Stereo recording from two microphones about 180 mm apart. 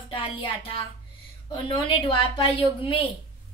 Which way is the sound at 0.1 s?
30° left (ahead or behind).